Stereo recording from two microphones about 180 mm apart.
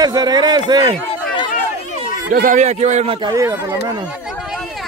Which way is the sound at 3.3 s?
15° right (ahead or behind).